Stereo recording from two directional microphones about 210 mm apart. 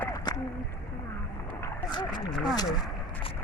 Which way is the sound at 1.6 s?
20° left (ahead or behind).